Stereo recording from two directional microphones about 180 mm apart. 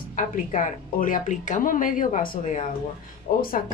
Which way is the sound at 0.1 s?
45° left (ahead or behind).